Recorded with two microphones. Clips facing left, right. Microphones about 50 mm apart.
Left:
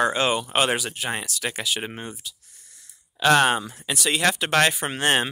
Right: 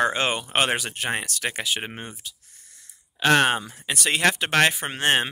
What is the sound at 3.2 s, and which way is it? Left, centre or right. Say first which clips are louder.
Speech: left 1 dB; right.